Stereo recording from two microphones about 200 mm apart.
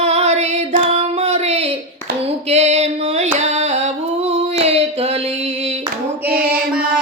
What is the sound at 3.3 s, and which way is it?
Singing, 35° right (ahead or behind).